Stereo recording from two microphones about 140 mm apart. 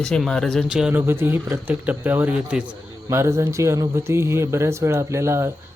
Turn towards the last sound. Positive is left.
turn(degrees=-20)  # may be behind; listen again after turning